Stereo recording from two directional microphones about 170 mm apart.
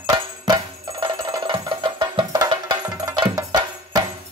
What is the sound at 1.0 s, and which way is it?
Music, 30° right (ahead or behind).